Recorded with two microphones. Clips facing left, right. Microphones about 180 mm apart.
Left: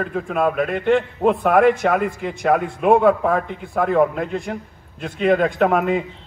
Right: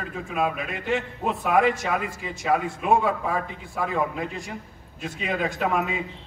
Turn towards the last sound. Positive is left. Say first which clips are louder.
# left 8 dB
turn(degrees=55)  # may be behind; listen again after turning